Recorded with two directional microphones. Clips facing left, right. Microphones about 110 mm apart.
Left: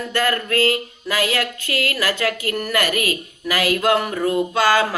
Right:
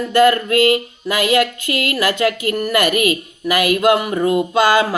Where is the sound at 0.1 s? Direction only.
20° right (ahead or behind).